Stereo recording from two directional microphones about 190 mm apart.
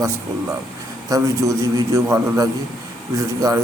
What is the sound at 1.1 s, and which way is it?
A man's voice, 20° right (ahead or behind).